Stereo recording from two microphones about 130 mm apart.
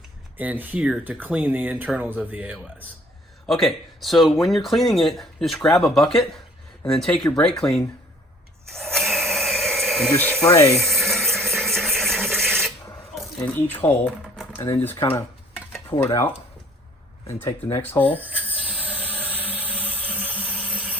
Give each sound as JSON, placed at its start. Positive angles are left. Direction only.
{"t": 0.3, "sound": "speech", "side_deg": -15}
{"t": 3.4, "sound": "speech", "side_deg": 0}
{"t": 8.7, "sound": "a sound", "side_deg": 0}
{"t": 10.1, "sound": "speech", "side_deg": 15}
{"t": 10.8, "sound": "a sound", "side_deg": 0}
{"t": 13.4, "sound": "speech", "side_deg": 15}
{"t": 15.7, "sound": "stir", "side_deg": 20}
{"t": 17.2, "sound": "speech", "side_deg": 20}
{"t": 18.2, "sound": "a sound", "side_deg": -10}